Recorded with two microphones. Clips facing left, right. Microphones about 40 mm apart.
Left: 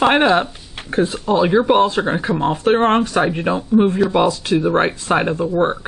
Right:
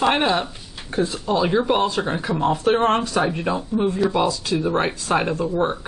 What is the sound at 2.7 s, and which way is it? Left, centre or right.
Speech, left.